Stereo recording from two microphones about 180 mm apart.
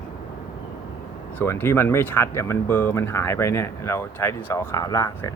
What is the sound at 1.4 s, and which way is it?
Speech, 10° left (ahead or behind).